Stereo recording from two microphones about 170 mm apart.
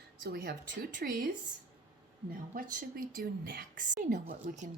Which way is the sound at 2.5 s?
55° right (ahead or behind).